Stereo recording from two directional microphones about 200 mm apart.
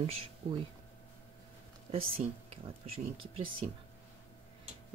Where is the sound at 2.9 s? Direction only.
25° right (ahead or behind).